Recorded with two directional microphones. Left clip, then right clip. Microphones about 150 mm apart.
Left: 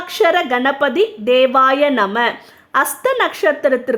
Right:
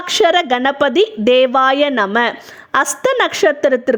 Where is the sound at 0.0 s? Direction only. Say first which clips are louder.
Right 2 dB; 45° right (ahead or behind).